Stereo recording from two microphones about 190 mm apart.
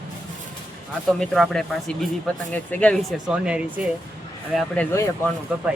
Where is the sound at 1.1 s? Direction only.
Centre (ahead or behind).